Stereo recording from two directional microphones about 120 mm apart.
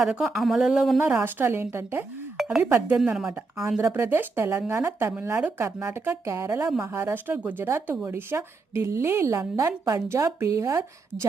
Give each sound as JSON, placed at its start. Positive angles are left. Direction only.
{"t": 0.0, "sound": "speech", "side_deg": -5}
{"t": 1.0, "sound": "a woman's voice", "side_deg": -15}